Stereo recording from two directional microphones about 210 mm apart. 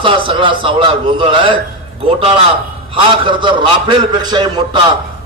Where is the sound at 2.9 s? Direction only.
25° right (ahead or behind).